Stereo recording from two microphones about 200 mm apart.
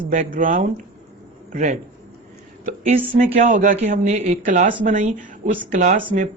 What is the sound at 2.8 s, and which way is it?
Speech, 40° right (ahead or behind).